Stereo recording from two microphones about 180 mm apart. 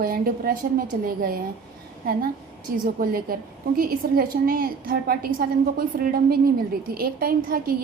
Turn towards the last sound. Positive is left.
turn(degrees=-55)  # may be behind; listen again after turning